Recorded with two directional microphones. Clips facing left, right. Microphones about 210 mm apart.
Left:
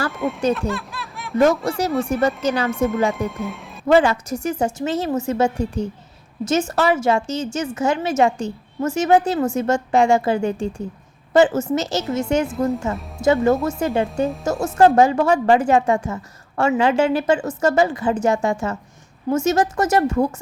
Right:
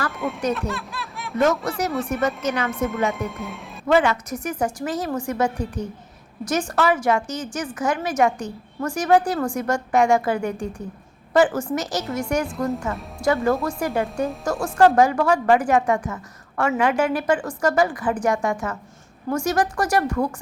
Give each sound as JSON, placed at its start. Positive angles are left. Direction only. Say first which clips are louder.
{"t": 0.5, "sound": "snicker", "louder": "left 3 dB", "side_deg": 0}
{"t": 1.4, "sound": "speech", "louder": "left 4 dB", "side_deg": 30}
{"t": 2.7, "sound": "speech", "louder": "left 4 dB", "side_deg": 0}
{"t": 3.8, "sound": "a woman's voice", "louder": "left 3 dB", "side_deg": 30}